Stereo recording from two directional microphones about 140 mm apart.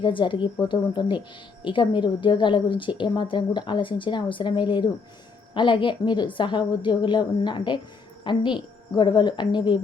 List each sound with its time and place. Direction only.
0.0 s a woman's voice: 35° left (ahead or behind)